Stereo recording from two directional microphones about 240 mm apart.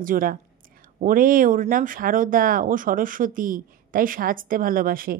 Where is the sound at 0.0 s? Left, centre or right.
Right.